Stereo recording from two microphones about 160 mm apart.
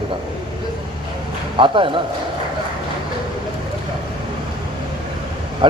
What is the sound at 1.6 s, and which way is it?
Speech, 30° right (ahead or behind).